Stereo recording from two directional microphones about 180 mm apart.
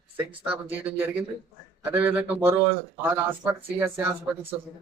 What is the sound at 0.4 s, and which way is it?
A man's voice, 10° right (ahead or behind).